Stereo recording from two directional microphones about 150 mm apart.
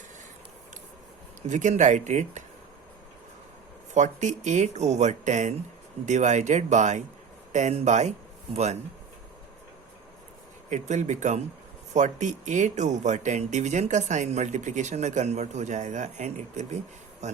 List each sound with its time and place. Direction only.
1.4 s speech: 55° right (ahead or behind)
3.9 s speech: 55° right (ahead or behind)
10.7 s speech: 50° right (ahead or behind)